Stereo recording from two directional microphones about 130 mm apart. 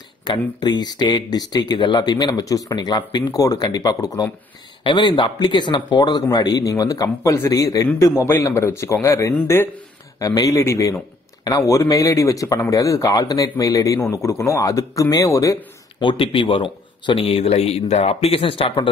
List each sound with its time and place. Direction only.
0.2 s speech: 35° left (ahead or behind)
16.0 s speech: 40° left (ahead or behind)